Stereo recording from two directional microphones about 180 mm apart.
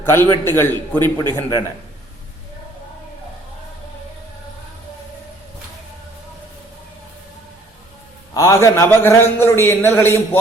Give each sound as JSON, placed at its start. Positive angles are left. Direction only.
{"t": 0.0, "sound": "a man's voice", "side_deg": 10}
{"t": 1.0, "sound": "a man's voice", "side_deg": -25}
{"t": 8.3, "sound": "a man's voice", "side_deg": 20}